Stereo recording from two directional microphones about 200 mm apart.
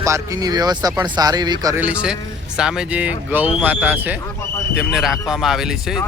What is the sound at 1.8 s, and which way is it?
Speech, 5° right (ahead or behind).